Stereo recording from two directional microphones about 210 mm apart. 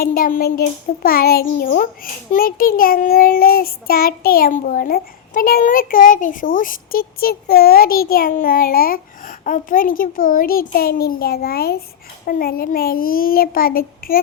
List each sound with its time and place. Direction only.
0.0 s a child's voice: 45° left (ahead or behind)